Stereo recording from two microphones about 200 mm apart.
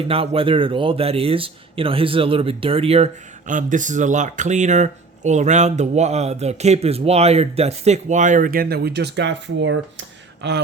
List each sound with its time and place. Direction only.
0.1 s speech: 30° right (ahead or behind); by 10.6 s 65° right (ahead or behind)